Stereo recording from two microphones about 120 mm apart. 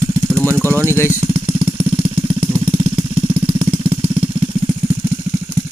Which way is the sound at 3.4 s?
50° right (ahead or behind).